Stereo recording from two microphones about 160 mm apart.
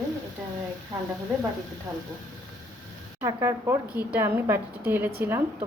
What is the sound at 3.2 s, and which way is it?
Speech, 15° right (ahead or behind).